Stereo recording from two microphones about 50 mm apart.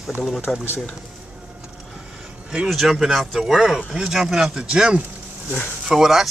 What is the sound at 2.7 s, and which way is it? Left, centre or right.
Speech, centre.